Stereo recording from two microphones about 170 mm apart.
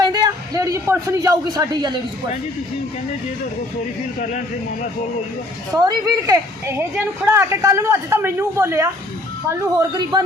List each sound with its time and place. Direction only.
0.0 s a man's voice: 25° right (ahead or behind)
5.7 s a woman's voice: 20° right (ahead or behind)